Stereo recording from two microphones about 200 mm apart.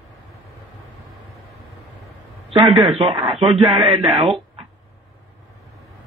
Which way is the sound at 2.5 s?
20° right (ahead or behind).